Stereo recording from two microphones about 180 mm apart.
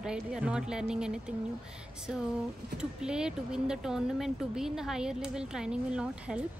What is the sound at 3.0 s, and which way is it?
A woman's voice, 5° right (ahead or behind).